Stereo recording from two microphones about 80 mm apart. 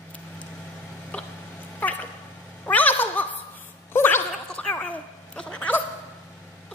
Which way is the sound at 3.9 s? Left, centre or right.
Left.